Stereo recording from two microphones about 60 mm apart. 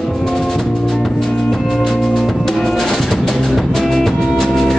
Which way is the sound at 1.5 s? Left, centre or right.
Centre.